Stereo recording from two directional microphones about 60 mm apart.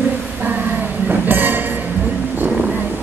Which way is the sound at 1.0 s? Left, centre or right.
Right.